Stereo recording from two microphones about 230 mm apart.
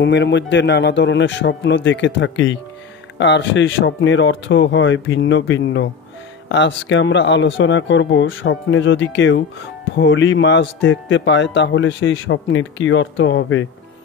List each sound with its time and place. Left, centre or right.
0.0 s a man's voice: left